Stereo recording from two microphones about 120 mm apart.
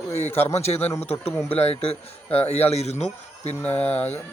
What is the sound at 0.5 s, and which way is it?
Speech, 60° left (ahead or behind).